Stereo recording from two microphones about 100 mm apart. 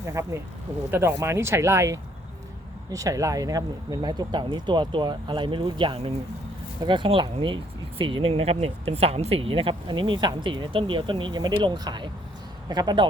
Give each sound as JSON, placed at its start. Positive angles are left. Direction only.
{"t": 0.0, "sound": "speech", "side_deg": -30}